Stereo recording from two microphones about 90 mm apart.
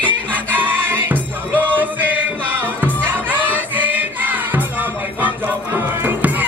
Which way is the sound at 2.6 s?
20° right (ahead or behind).